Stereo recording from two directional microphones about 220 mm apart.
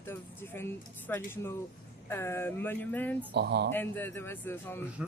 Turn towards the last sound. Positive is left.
turn(degrees=10)  # may be behind; listen again after turning